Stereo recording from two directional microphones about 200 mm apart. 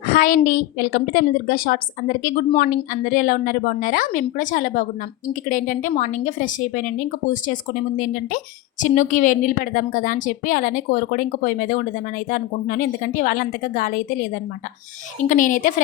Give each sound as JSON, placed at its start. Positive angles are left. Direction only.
{"t": 0.0, "sound": "a woman's voice", "side_deg": 45}
{"t": 15.2, "sound": "a woman's voice", "side_deg": 40}